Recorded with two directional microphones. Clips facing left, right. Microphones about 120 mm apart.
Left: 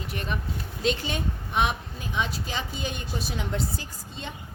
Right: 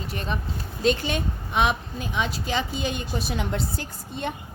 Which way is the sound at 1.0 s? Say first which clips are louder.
Right 3 dB; 80° right.